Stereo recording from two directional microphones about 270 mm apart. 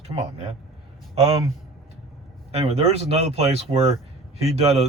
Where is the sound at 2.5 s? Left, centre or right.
Right.